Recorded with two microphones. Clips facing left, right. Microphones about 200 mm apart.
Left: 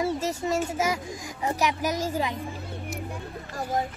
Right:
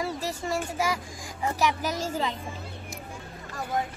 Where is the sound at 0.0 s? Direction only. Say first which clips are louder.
Left 4 dB; 20° left (ahead or behind).